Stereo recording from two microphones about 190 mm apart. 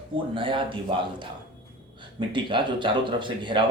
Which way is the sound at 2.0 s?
25° right (ahead or behind).